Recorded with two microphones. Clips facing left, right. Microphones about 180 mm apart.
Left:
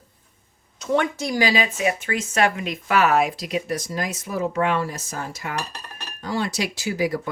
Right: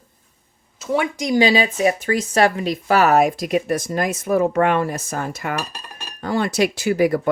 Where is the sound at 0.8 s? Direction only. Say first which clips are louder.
Right 1 dB; 5° right (ahead or behind).